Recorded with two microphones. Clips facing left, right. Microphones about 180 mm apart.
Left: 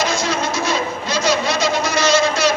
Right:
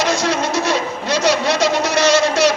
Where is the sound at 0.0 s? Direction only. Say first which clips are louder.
Right 2 dB; 70° right (ahead or behind).